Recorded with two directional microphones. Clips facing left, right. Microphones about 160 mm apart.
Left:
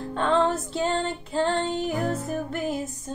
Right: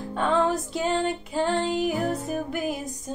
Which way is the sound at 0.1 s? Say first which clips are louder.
Even; 10° right (ahead or behind).